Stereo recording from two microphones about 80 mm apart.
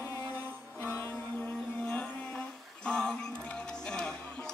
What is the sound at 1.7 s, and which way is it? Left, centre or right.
Music, centre.